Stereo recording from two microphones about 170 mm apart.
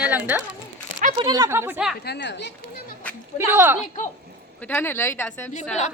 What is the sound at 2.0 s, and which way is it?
Speech, 80° left.